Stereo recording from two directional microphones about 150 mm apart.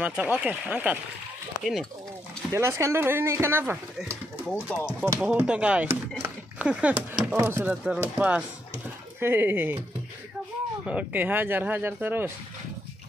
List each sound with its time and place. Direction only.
0.0 s speech: 5° right (ahead or behind)
2.5 s speech: 20° right (ahead or behind)
4.5 s speech: 5° left (ahead or behind)
4.7 s speech: 15° right (ahead or behind)
10.9 s speech: 10° right (ahead or behind)